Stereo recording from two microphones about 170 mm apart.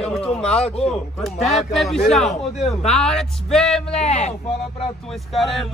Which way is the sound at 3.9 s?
40° left (ahead or behind).